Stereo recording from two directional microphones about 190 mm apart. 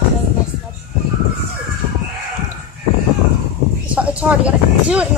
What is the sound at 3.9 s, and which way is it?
Speech, 5° right (ahead or behind).